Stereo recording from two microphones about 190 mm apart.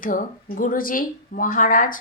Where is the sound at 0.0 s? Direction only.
45° left (ahead or behind).